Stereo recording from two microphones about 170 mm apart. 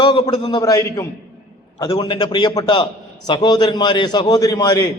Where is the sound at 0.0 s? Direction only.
25° left (ahead or behind).